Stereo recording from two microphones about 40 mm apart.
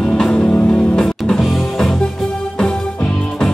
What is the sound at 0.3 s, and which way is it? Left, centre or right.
Music, left.